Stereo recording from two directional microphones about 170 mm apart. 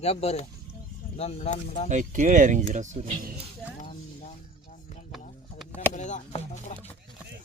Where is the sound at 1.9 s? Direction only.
45° right (ahead or behind).